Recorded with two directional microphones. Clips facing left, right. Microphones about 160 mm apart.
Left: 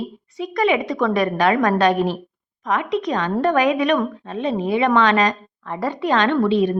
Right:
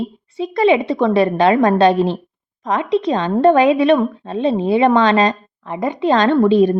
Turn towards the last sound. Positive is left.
turn(degrees=-40)  # may be behind; listen again after turning